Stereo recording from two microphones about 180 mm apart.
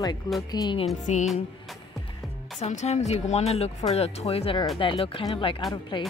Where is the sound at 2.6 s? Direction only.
40° left (ahead or behind).